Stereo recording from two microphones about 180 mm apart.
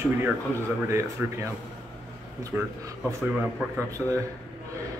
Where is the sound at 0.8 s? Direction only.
15° right (ahead or behind).